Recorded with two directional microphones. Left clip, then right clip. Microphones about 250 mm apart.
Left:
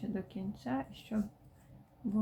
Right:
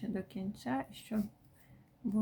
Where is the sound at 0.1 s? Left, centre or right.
Centre.